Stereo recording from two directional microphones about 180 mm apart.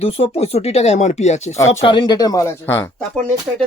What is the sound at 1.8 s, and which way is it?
Speech, 25° left (ahead or behind).